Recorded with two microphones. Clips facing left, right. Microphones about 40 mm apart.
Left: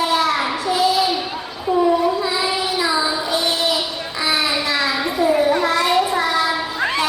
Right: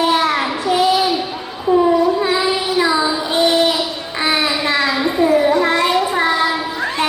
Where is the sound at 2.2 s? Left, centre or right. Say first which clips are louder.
Right 4 dB; right.